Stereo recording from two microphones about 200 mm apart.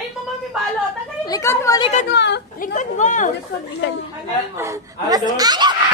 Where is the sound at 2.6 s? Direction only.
40° left (ahead or behind).